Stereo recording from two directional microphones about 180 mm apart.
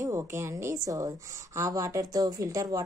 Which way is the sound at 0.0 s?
15° right (ahead or behind).